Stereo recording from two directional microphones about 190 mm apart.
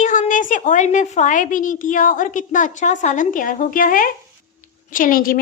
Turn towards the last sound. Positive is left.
turn(degrees=50)  # may be behind; listen again after turning